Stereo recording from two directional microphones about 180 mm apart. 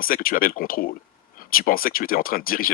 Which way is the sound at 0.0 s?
55° left (ahead or behind).